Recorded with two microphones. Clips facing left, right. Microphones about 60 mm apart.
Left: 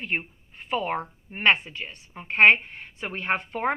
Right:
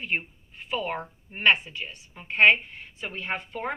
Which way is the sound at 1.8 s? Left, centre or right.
Left.